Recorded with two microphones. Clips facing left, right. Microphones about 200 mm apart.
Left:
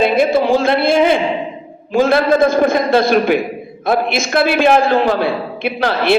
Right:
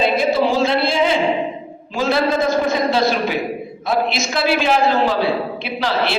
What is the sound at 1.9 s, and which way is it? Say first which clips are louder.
A woman's voice: left 6 dB; 55° left (ahead or behind).